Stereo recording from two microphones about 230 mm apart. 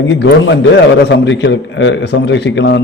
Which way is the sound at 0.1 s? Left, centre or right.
Left.